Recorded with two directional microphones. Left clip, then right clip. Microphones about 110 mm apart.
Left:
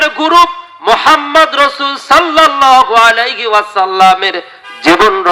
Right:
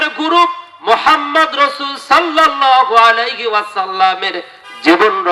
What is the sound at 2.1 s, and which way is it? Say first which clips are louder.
A man's voice: left 3 dB; 35° left (ahead or behind).